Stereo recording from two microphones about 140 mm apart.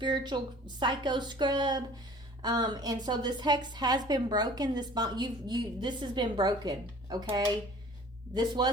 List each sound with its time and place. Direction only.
0.0 s a woman's voice: 35° right (ahead or behind)